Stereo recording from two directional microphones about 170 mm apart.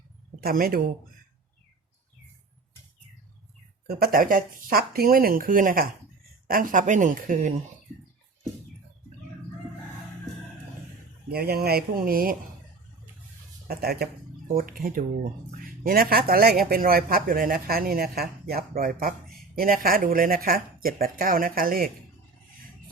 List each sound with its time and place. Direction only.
0.4 s speech: 60° right (ahead or behind)
3.8 s speech: 60° right (ahead or behind)
11.3 s speech: 65° right (ahead or behind)
13.7 s speech: 65° right (ahead or behind)